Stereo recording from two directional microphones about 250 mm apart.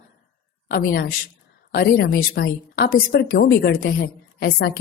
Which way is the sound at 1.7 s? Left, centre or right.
Left.